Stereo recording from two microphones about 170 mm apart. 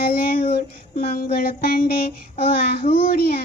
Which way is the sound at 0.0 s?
65° left (ahead or behind).